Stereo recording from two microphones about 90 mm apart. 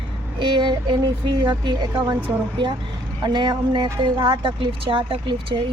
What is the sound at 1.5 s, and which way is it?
Speech, 50° right (ahead or behind).